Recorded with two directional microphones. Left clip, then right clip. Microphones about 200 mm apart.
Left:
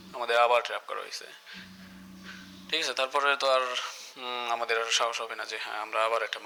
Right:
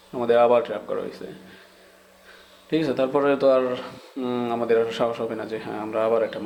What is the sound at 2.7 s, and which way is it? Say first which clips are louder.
Speech: right 6 dB; 35° left (ahead or behind).